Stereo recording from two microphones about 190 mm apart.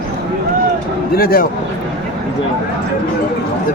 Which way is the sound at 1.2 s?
50° left (ahead or behind).